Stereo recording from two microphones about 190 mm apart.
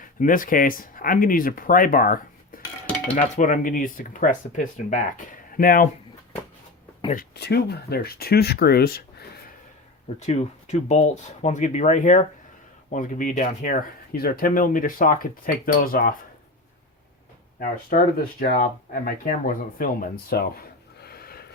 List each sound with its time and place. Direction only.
0.0 s speech: 45° left (ahead or behind)
7.3 s speech: 60° left (ahead or behind)
10.2 s speech: 35° left (ahead or behind)
17.6 s speech: 50° left (ahead or behind)
21.0 s a sound: 55° left (ahead or behind)